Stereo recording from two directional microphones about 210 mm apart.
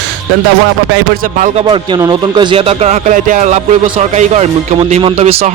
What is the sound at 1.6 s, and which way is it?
Speech, 20° right (ahead or behind).